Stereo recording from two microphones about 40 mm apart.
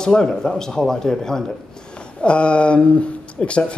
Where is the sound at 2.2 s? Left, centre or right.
Left.